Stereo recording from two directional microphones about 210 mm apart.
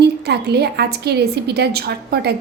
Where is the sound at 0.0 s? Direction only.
50° right (ahead or behind).